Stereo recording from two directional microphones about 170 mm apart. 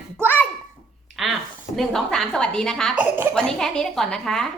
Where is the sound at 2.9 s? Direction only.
10° right (ahead or behind).